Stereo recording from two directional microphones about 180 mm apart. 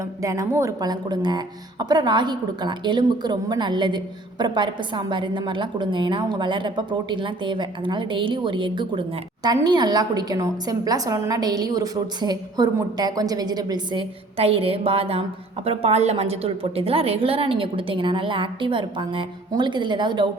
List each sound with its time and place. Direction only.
0.0 s speech: 20° right (ahead or behind)